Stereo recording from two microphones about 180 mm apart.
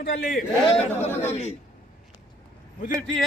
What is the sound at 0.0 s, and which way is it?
Speech, 55° left (ahead or behind).